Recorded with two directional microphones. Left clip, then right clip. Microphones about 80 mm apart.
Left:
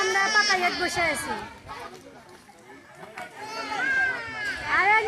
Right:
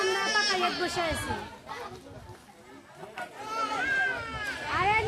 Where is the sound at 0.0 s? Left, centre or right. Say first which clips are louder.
Left 5 dB; left.